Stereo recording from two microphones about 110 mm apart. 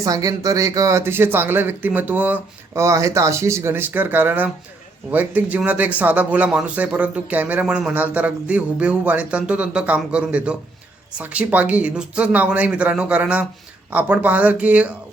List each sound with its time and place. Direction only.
0.0 s speech: 30° right (ahead or behind); by 14.9 s 10° right (ahead or behind)